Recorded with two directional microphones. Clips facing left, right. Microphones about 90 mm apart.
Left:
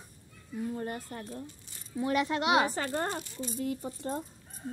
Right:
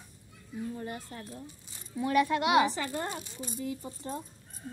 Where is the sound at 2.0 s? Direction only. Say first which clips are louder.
Right 2 dB; 20° left (ahead or behind).